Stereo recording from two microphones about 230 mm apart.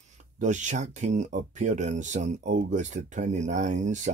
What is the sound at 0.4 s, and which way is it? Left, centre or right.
Speech, right.